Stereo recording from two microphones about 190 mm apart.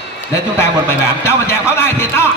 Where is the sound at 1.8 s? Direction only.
15° left (ahead or behind).